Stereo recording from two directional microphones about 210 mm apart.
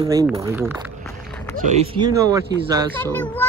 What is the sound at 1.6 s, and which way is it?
Speech, 30° right (ahead or behind).